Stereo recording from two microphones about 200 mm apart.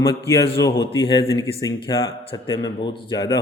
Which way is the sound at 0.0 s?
15° left (ahead or behind).